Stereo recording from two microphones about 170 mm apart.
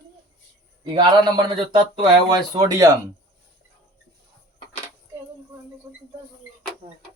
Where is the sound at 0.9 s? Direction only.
25° right (ahead or behind).